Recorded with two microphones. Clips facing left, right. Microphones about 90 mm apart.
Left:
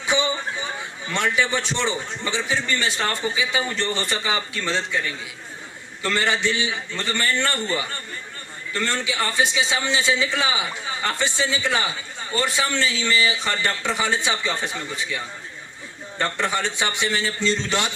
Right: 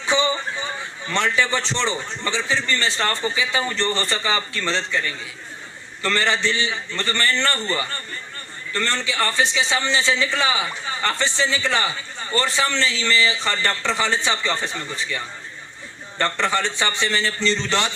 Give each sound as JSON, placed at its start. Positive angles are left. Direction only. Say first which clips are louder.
{"t": 0.1, "sound": "a man's voice", "louder": "right 2 dB", "side_deg": 15}
{"t": 8.7, "sound": "a man's voice", "louder": "right 1 dB", "side_deg": 10}